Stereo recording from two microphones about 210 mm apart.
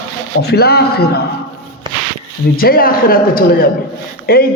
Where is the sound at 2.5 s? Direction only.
45° left (ahead or behind).